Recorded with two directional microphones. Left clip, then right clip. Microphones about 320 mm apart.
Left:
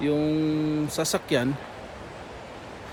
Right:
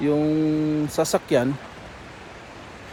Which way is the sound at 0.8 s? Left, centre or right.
Centre.